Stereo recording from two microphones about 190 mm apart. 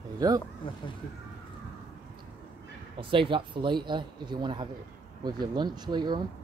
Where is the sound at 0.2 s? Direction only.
20° right (ahead or behind).